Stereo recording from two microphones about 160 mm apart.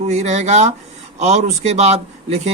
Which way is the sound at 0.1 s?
45° right (ahead or behind).